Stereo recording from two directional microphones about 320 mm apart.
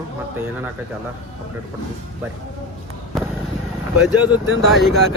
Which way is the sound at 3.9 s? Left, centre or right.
Centre.